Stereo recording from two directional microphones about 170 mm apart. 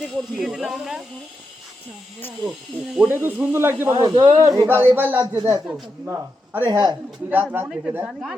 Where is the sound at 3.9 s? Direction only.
25° right (ahead or behind).